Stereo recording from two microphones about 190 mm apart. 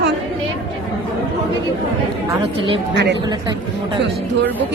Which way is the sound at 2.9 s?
65° right (ahead or behind).